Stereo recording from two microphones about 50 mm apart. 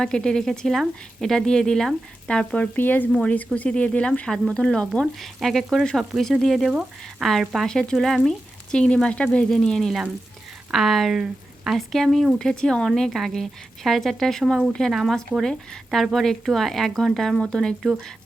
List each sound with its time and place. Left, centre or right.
0.0 s speech: centre
2.3 s speech: left
2.7 s speech: left; by 4.9 s centre
5.2 s speech: centre
6.7 s speech: centre
7.3 s speech: centre
7.7 s speech: centre
7.9 s speech: centre; by 9.5 s left
9.5 s speech: centre
10.7 s speech: centre
11.2 s a sound: centre
11.9 s speech: centre
12.4 s speech: centre